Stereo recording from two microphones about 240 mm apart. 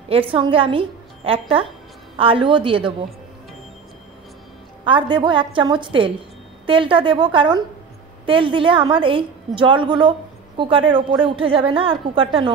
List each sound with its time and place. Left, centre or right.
0.1 s a woman's voice: right
4.8 s a woman's voice: centre